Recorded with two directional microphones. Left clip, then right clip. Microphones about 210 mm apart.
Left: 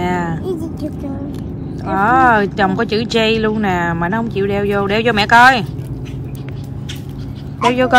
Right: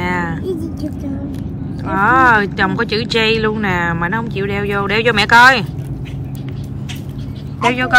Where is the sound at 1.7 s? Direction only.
15° left (ahead or behind).